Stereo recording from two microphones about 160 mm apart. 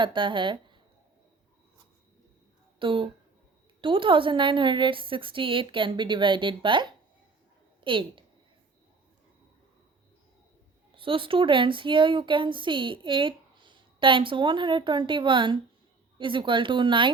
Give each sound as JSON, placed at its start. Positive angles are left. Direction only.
{"t": 0.0, "sound": "speech", "side_deg": -30}
{"t": 2.7, "sound": "a woman's voice", "side_deg": -30}
{"t": 10.9, "sound": "a woman's voice", "side_deg": -35}